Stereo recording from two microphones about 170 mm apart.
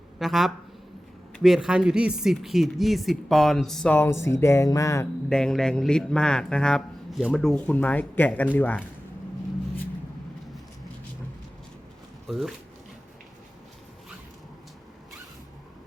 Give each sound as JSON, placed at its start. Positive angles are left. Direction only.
{"t": 0.2, "sound": "speech", "side_deg": 0}
{"t": 5.3, "sound": "speech", "side_deg": 5}
{"t": 12.3, "sound": "speech", "side_deg": 0}